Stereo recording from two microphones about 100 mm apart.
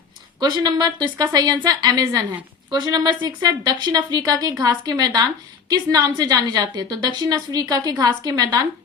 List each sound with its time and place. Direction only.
0.3 s a woman's voice: 45° right (ahead or behind)